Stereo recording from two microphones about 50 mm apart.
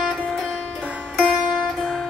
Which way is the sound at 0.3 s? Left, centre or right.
Centre.